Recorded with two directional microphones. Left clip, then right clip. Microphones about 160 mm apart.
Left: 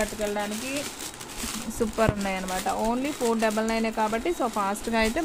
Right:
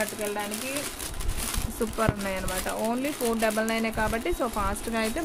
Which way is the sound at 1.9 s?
40° left (ahead or behind).